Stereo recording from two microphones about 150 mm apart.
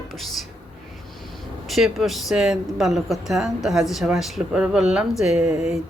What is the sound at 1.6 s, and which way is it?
Speech, centre (ahead or behind).